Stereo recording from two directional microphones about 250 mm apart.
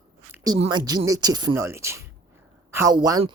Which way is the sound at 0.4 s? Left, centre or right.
Centre.